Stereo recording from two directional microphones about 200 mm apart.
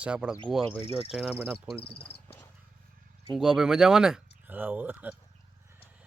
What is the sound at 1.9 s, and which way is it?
Speech, 25° left (ahead or behind).